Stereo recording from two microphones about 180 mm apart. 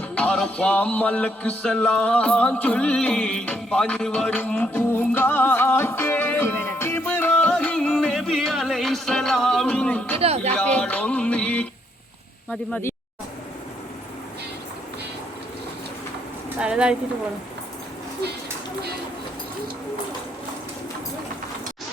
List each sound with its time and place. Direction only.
0.2 s music: 5° left (ahead or behind)
10.2 s speech: 35° right (ahead or behind)
10.5 s music: 5° left (ahead or behind)
12.5 s speech: 5° left (ahead or behind)
16.6 s speech: 5° right (ahead or behind)